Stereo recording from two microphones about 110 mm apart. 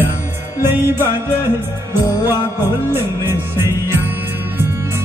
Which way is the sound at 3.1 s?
20° right (ahead or behind).